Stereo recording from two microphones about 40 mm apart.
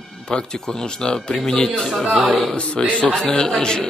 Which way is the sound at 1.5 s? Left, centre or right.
Centre.